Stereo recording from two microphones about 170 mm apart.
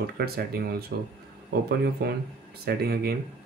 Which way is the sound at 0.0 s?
65° right (ahead or behind).